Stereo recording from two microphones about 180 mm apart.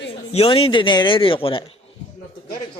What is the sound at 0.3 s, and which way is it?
Speech, 30° left (ahead or behind).